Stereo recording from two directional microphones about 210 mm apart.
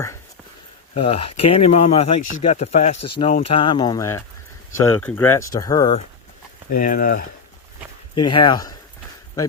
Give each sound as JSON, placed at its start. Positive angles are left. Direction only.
{"t": 0.9, "sound": "speech", "side_deg": 25}
{"t": 6.7, "sound": "speech", "side_deg": 40}
{"t": 8.1, "sound": "speech", "side_deg": 25}